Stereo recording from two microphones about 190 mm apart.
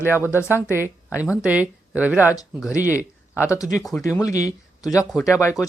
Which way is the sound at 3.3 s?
15° left (ahead or behind).